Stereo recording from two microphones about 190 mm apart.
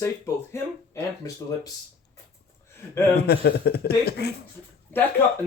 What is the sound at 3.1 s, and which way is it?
A man's voice, 55° left (ahead or behind).